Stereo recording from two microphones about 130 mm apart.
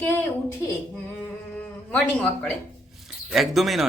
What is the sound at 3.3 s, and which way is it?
Speech, centre (ahead or behind).